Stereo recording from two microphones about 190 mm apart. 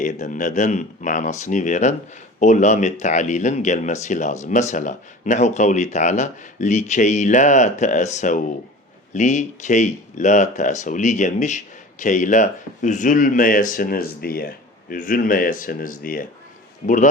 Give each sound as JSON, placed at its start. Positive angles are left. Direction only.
{"t": 0.0, "sound": "speech", "side_deg": 40}